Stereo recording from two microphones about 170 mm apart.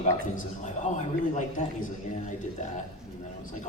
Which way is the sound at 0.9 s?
45° left (ahead or behind).